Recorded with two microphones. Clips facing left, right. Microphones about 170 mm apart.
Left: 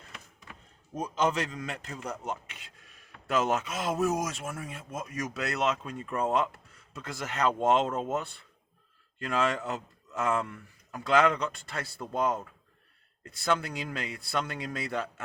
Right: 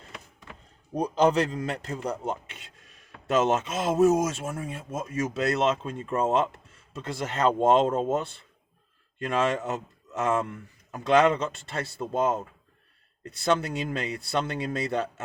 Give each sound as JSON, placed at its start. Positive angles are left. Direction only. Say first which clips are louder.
{"t": 0.9, "sound": "speech", "louder": "right 6 dB", "side_deg": -35}